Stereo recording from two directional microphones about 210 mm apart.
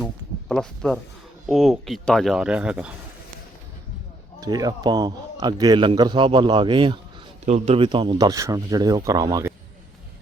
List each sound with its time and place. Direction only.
0.0 s a sound: centre (ahead or behind)
1.5 s speech: centre (ahead or behind)
4.4 s a man's voice: 20° right (ahead or behind)